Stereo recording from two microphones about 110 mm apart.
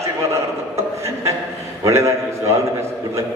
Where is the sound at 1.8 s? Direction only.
25° right (ahead or behind).